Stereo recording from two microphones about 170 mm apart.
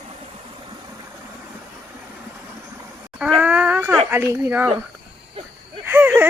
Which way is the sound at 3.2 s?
5° right (ahead or behind).